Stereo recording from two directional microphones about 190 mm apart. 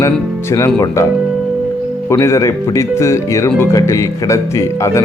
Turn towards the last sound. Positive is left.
turn(degrees=15)  # may be behind; listen again after turning